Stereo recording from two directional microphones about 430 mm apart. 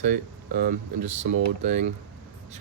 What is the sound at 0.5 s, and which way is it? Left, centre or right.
Speech, centre.